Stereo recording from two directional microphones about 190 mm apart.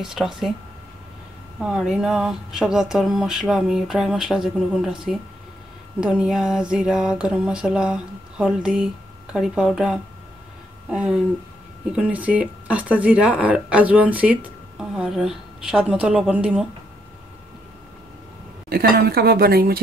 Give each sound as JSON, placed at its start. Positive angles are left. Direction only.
{"t": 0.0, "sound": "speech", "side_deg": 0}
{"t": 1.6, "sound": "speech", "side_deg": 0}
{"t": 18.7, "sound": "a woman's voice", "side_deg": -55}